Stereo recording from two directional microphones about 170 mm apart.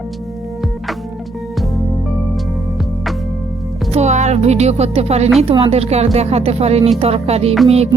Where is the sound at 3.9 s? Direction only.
40° right (ahead or behind).